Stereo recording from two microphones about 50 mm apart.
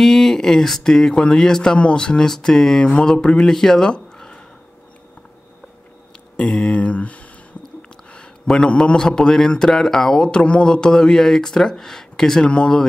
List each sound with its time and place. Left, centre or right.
0.0 s speech: centre
6.4 s speech: centre
6.8 s speech: left
8.1 s a man's voice: centre
12.4 s speech: centre